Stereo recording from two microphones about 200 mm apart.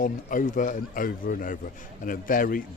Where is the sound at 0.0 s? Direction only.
40° left (ahead or behind).